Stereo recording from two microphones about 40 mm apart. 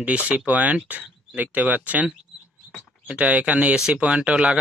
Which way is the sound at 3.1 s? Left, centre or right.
Right.